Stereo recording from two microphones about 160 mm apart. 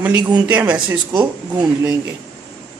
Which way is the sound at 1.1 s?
25° right (ahead or behind).